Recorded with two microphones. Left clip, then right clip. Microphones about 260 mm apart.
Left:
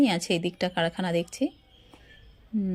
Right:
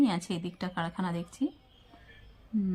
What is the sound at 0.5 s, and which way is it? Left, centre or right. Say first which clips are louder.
Speech: left 8 dB; centre.